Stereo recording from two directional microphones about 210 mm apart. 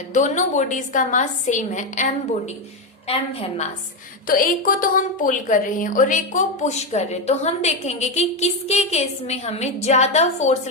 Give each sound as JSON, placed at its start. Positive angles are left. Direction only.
{"t": 0.1, "sound": "a woman's voice", "side_deg": 35}
{"t": 3.1, "sound": "a woman's voice", "side_deg": 30}
{"t": 4.3, "sound": "a woman's voice", "side_deg": 40}